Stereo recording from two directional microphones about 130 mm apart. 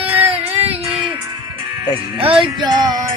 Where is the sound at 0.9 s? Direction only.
5° right (ahead or behind).